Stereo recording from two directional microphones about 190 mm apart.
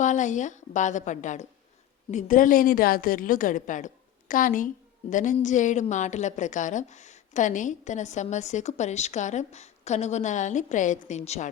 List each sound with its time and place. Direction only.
0.0 s a woman's voice: 40° left (ahead or behind)